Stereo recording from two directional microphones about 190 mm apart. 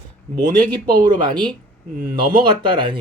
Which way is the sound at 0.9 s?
25° right (ahead or behind).